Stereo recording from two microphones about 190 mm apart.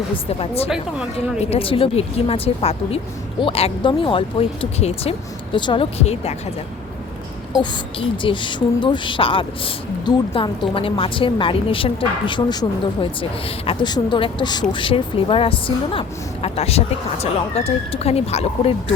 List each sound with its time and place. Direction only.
0.3 s a woman's voice: 30° left (ahead or behind)
7.6 s a woman's voice: 25° left (ahead or behind)